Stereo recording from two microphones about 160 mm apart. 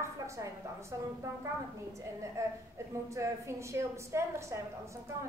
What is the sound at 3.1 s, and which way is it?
A woman's voice, 20° right (ahead or behind).